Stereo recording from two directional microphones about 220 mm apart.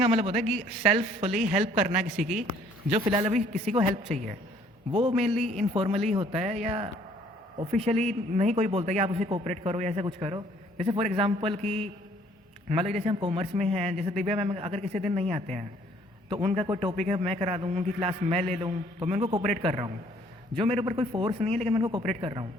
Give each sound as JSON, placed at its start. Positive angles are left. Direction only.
{"t": 0.0, "sound": "a man's voice", "side_deg": -25}
{"t": 2.1, "sound": "a man's voice", "side_deg": 0}
{"t": 2.9, "sound": "a man's voice", "side_deg": -25}
{"t": 5.2, "sound": "a man's voice", "side_deg": 0}
{"t": 5.5, "sound": "a man's voice", "side_deg": -25}